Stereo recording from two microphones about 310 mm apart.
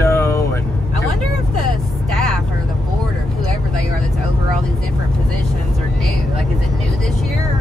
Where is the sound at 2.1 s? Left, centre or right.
Centre.